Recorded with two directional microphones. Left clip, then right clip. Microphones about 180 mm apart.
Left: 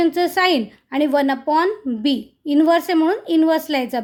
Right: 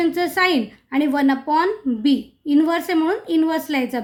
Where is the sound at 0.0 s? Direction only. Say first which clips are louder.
Left 2 dB; 40° left (ahead or behind).